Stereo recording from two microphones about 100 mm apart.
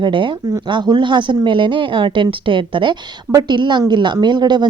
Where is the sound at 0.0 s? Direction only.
55° right (ahead or behind).